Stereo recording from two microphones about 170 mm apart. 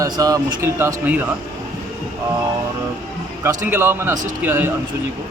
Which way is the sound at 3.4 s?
15° right (ahead or behind).